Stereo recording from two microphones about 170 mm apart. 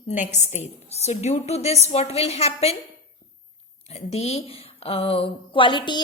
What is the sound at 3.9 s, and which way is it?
A woman's voice, 40° left (ahead or behind).